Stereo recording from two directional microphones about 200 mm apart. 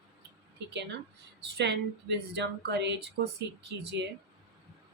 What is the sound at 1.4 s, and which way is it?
Speech, 60° right (ahead or behind).